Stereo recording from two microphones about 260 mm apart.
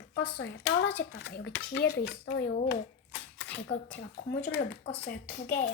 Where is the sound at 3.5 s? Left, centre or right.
Left.